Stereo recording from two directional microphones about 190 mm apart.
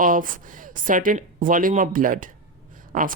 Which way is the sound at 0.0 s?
45° right (ahead or behind).